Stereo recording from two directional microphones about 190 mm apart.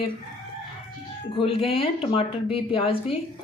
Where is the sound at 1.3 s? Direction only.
30° left (ahead or behind).